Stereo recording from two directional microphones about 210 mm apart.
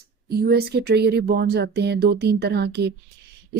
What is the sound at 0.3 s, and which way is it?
Speech, 50° right (ahead or behind).